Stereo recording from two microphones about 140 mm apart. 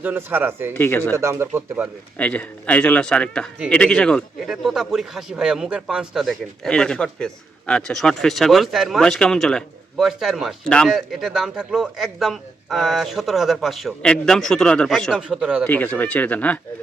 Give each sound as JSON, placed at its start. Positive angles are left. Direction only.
{"t": 0.0, "sound": "speech", "side_deg": -15}
{"t": 0.7, "sound": "speech", "side_deg": 15}
{"t": 1.1, "sound": "speech", "side_deg": -20}
{"t": 2.1, "sound": "speech", "side_deg": 10}
{"t": 15.6, "sound": "speech", "side_deg": 10}